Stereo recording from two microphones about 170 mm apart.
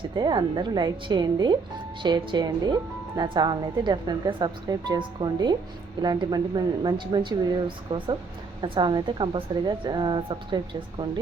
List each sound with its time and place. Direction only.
0.2 s speech: 25° right (ahead or behind)